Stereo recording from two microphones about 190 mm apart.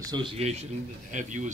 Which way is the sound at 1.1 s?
40° right (ahead or behind).